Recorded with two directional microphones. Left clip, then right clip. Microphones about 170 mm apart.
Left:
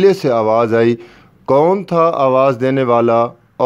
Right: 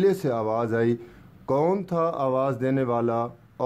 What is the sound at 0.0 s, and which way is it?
Speech, 30° left (ahead or behind).